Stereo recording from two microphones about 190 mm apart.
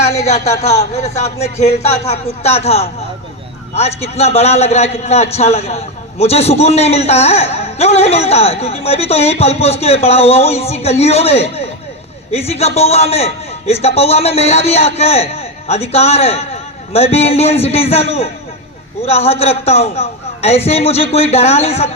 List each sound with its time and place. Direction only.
0.2 s a man's voice: 35° left (ahead or behind)